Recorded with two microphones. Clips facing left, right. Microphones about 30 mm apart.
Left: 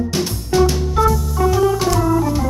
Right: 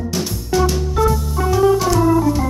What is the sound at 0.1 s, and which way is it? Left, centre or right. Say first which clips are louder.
Music: left 1 dB; centre.